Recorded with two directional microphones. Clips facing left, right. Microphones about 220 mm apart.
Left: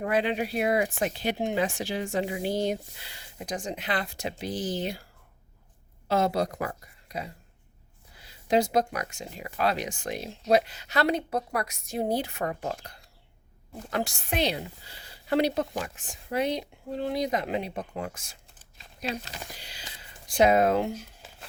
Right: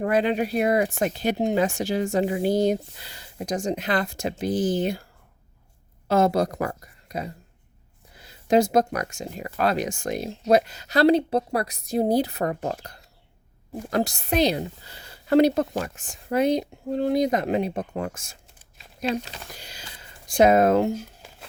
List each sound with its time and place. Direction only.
0.0 s speech: 45° right (ahead or behind)
6.1 s speech: 45° right (ahead or behind)
8.4 s a woman's voice: 45° right (ahead or behind)
19.5 s speech: 45° right (ahead or behind)